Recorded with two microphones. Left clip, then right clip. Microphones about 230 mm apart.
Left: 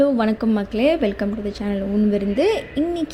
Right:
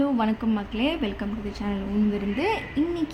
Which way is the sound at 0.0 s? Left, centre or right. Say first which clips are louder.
Left 7 dB; left.